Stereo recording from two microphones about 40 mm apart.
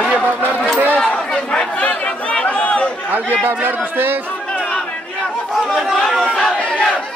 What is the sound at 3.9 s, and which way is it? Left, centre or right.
Speech, right.